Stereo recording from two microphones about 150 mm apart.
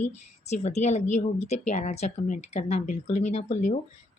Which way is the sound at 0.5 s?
50° left (ahead or behind).